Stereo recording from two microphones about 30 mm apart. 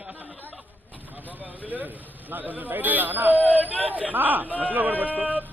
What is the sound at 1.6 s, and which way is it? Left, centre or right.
Speech, right.